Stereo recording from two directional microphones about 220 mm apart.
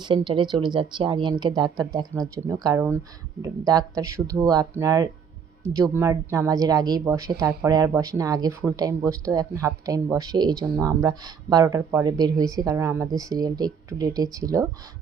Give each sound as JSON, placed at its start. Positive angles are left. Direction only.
{"t": 0.0, "sound": "a woman's voice", "side_deg": -20}